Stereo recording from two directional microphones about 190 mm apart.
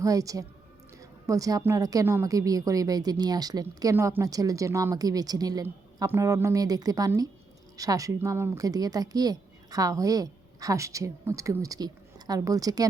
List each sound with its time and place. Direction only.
0.0 s a woman's voice: 20° right (ahead or behind)